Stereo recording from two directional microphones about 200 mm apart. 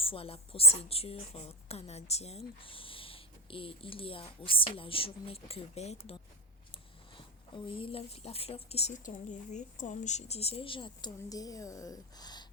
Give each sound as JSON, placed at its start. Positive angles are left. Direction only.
{"t": 0.0, "sound": "a woman's voice", "side_deg": 30}
{"t": 7.2, "sound": "a woman's voice", "side_deg": 25}